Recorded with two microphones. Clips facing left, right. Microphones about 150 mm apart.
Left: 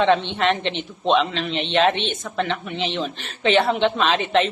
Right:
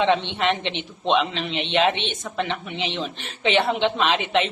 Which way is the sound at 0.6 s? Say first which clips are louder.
Left 3 dB; 50° left (ahead or behind).